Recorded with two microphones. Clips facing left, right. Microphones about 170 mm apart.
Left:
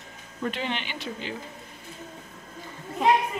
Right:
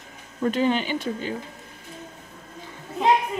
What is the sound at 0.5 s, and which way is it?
Speech, 40° right (ahead or behind).